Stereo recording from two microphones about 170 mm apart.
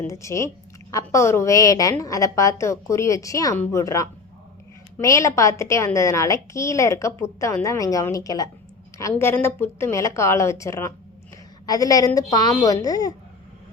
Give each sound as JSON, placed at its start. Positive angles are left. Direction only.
{"t": 0.0, "sound": "a woman's voice", "side_deg": 15}